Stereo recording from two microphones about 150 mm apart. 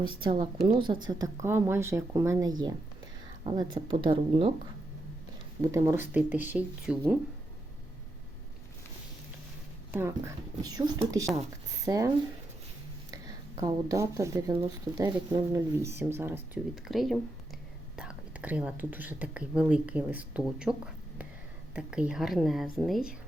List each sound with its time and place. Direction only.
0.0 s speech: 35° right (ahead or behind)
1.0 s speech: 20° right (ahead or behind); by 4.5 s 40° right (ahead or behind)
5.7 s speech: 20° right (ahead or behind)
9.9 s speech: 15° right (ahead or behind)
13.6 s speech: 30° right (ahead or behind)
16.9 s a woman's voice: centre (ahead or behind)